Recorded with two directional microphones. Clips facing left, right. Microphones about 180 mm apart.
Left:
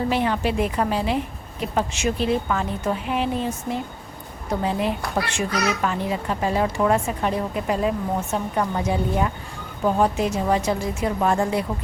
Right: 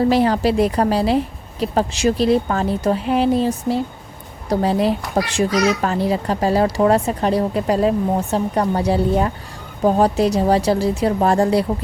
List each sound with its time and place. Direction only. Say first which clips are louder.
0.1 s a child's voice: right 6 dB; 35° right (ahead or behind)